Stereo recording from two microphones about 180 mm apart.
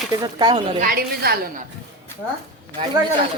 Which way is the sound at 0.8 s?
55° right (ahead or behind).